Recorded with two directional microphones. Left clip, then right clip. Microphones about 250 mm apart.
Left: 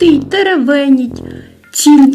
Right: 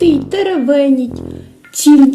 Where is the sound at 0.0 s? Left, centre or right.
Left.